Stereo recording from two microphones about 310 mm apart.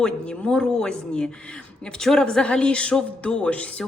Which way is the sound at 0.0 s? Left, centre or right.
Centre.